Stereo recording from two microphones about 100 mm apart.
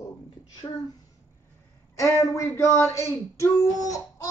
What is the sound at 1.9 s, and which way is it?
Speech, 30° left (ahead or behind).